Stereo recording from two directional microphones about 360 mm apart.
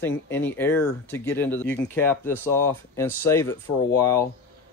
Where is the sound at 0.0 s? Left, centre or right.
Centre.